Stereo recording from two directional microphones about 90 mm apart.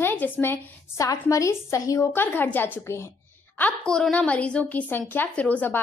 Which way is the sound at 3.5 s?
15° left (ahead or behind).